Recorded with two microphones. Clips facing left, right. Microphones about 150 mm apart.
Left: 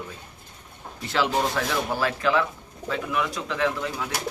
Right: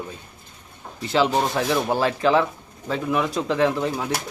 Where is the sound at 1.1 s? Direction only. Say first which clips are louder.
Right 4 dB; 25° right (ahead or behind).